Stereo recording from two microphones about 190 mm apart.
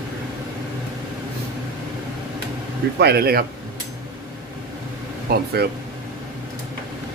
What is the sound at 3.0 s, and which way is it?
Speech, 55° right (ahead or behind).